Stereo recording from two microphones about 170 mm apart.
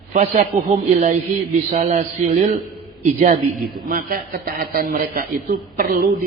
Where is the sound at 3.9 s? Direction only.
60° right (ahead or behind).